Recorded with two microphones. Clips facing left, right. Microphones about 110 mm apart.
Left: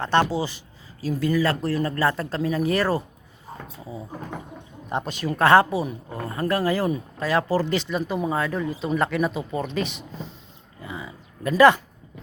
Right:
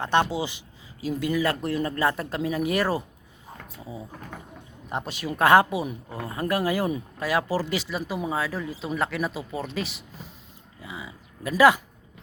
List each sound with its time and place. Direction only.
0.0 s speech: 15° right (ahead or behind)
4.9 s speech: 5° right (ahead or behind)
10.8 s a sound: 5° right (ahead or behind)